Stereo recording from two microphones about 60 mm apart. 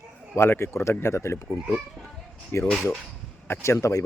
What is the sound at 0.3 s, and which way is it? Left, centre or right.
Speech, left.